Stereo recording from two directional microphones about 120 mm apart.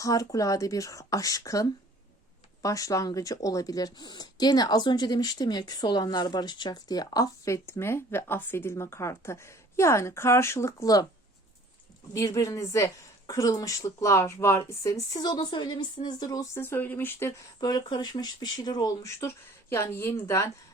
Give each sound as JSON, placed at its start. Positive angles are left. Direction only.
{"t": 0.0, "sound": "speech", "side_deg": 30}
{"t": 12.1, "sound": "speech", "side_deg": 25}
{"t": 15.1, "sound": "speech", "side_deg": 35}
{"t": 16.6, "sound": "speech", "side_deg": 20}
{"t": 17.6, "sound": "speech", "side_deg": 35}
{"t": 19.2, "sound": "speech", "side_deg": 20}